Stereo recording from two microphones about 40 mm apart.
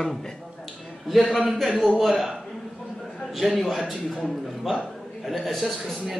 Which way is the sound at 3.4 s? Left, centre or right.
Centre.